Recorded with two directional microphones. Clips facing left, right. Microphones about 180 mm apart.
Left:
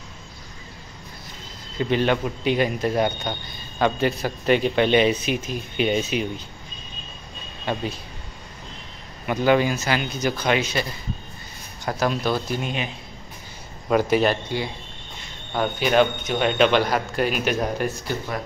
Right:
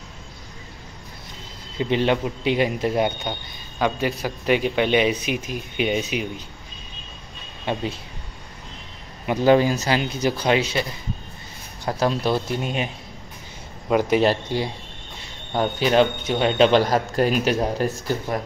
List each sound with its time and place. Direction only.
1.8 s a man's voice: 25° right (ahead or behind)
3.8 s a man's voice: 10° right (ahead or behind)
7.7 s a man's voice: 25° right (ahead or behind)
9.4 s a man's voice: 35° right (ahead or behind)
12.6 s a man's voice: 45° right (ahead or behind)
13.8 s a man's voice: 15° right (ahead or behind)
14.2 s speech: 35° right (ahead or behind)